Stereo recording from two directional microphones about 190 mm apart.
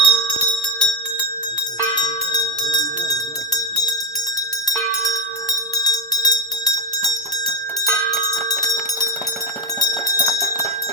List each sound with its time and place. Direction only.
0.0 s bell: 25° left (ahead or behind)
2.0 s bell: 20° left (ahead or behind)
9.8 s a sound: 20° left (ahead or behind)